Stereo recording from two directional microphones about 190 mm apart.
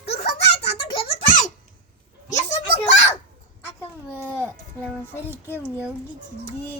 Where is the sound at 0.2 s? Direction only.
60° left (ahead or behind).